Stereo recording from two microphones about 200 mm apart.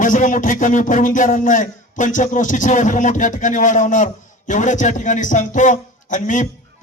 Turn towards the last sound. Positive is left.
turn(degrees=40)  # may be behind; listen again after turning